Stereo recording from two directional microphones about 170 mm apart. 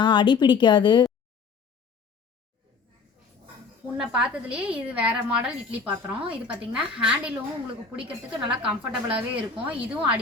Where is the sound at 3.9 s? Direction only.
5° right (ahead or behind).